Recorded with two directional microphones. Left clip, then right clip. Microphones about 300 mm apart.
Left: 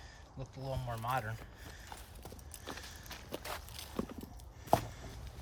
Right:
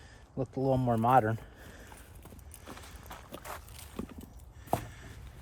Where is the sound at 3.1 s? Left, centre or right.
Centre.